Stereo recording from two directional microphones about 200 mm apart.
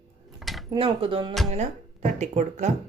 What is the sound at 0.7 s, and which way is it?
Speech, 25° right (ahead or behind).